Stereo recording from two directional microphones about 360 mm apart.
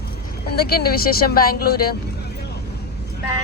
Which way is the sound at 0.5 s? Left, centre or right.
Left.